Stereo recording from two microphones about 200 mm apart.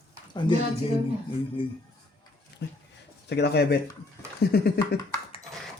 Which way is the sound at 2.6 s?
60° left (ahead or behind).